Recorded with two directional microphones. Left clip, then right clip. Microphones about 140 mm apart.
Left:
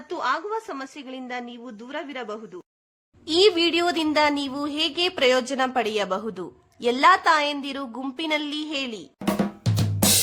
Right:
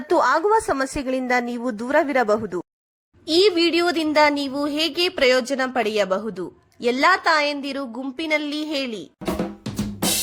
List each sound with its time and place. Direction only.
0.1 s a woman's voice: 45° right (ahead or behind)
3.2 s a woman's voice: 10° right (ahead or behind)